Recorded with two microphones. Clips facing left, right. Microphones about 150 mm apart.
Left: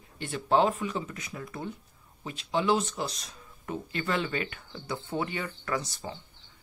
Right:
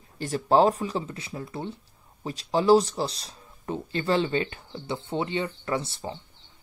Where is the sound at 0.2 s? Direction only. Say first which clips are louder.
Right 4 dB; 40° right (ahead or behind).